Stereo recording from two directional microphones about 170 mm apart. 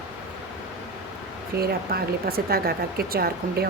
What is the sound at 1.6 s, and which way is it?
A woman's voice, 65° right (ahead or behind).